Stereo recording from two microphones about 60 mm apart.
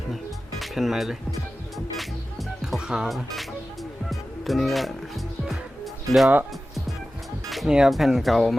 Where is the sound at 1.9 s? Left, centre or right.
Centre.